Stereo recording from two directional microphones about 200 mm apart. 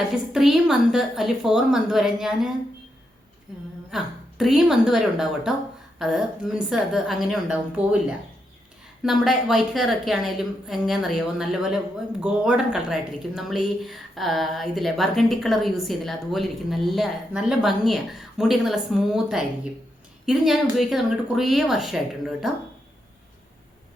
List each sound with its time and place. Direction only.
0.1 s a woman's voice: centre (ahead or behind)
3.5 s a woman's voice: centre (ahead or behind)
9.0 s a woman's voice: centre (ahead or behind)